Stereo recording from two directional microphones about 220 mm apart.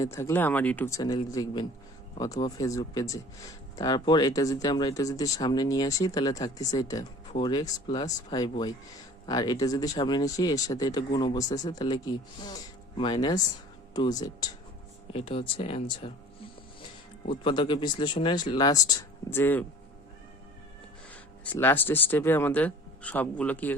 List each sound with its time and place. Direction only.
0.0 s speech: 10° left (ahead or behind)
17.2 s speech: 20° left (ahead or behind)
21.1 s speech: 10° left (ahead or behind)